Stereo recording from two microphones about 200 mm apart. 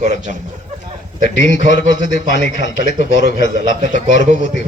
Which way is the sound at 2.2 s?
35° right (ahead or behind).